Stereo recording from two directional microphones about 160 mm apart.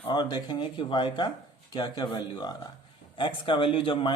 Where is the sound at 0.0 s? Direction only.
30° left (ahead or behind).